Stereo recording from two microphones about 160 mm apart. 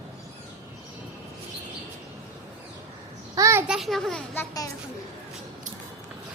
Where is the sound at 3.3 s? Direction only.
20° right (ahead or behind).